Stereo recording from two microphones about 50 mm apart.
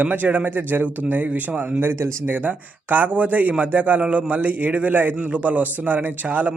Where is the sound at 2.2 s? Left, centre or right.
Right.